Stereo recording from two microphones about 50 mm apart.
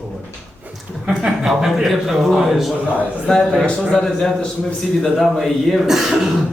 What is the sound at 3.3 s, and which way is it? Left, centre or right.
A man's voice, centre.